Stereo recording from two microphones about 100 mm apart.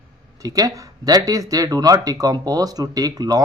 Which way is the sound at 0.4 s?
35° right (ahead or behind).